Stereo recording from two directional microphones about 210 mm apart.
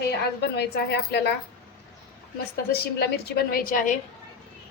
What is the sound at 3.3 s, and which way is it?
Speech, 45° left (ahead or behind).